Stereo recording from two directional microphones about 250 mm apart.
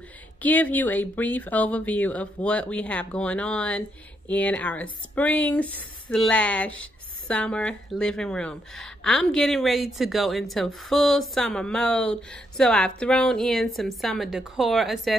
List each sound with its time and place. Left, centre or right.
0.4 s speech: centre